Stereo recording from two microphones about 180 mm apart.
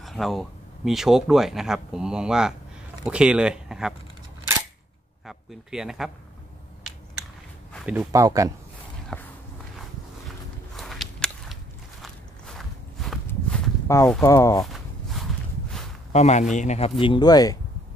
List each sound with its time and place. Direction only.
0.0 s speech: centre (ahead or behind)
5.2 s a man's voice: centre (ahead or behind)
7.8 s speech: 5° right (ahead or behind)
8.1 s speech: 20° right (ahead or behind)
9.1 s walk: 5° left (ahead or behind)
10.8 s a sound: centre (ahead or behind)
12.0 s walk: centre (ahead or behind)
13.3 s walk: 15° left (ahead or behind)
14.2 s speech: 15° left (ahead or behind)
14.7 s walk: centre (ahead or behind)
16.1 s a man's voice: 40° left (ahead or behind)
17.0 s speech: 25° left (ahead or behind)